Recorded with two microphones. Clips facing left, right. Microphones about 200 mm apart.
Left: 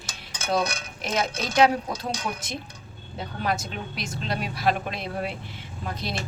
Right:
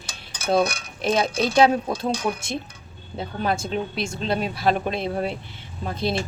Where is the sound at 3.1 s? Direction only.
25° right (ahead or behind).